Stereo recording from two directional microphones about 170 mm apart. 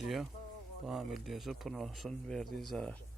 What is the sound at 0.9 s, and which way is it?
Speech, centre (ahead or behind).